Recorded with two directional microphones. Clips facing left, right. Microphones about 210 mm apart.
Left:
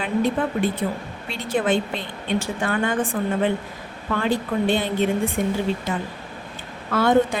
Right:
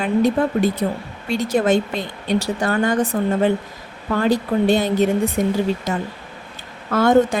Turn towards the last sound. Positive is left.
turn(degrees=-45)  # may be behind; listen again after turning